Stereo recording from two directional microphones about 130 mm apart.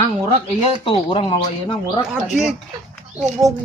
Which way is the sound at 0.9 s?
45° left (ahead or behind).